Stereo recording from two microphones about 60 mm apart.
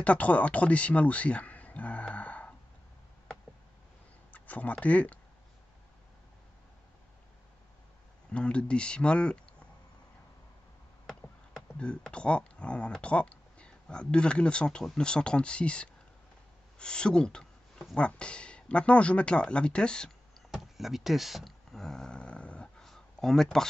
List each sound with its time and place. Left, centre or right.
0.0 s speech: left
4.3 s speech: left
8.3 s speech: centre
12.1 s speech: centre
20.5 s a sound: centre
22.8 s a sound: centre